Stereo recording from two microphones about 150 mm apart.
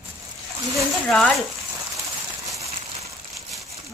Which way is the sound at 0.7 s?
Centre (ahead or behind).